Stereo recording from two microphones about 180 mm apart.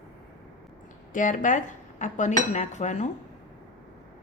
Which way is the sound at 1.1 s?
45° left (ahead or behind).